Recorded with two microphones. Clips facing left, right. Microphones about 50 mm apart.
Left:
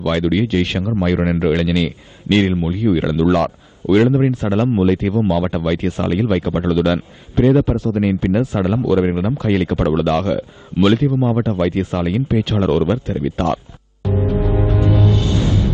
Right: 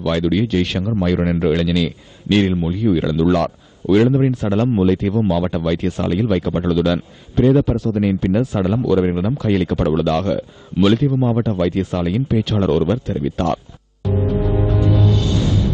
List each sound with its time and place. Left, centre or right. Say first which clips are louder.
0.0 s speech: left 1 dB; left
14.0 s music: left 1 dB; left